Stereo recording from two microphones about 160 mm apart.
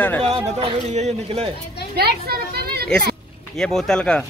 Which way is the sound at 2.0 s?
80° right.